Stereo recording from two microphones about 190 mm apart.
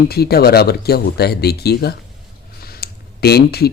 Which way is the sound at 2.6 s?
55° left (ahead or behind).